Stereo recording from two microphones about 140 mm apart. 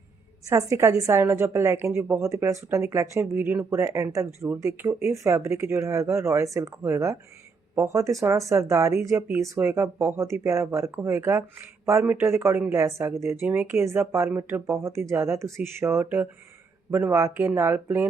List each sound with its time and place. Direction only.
0.4 s a woman's voice: 20° right (ahead or behind)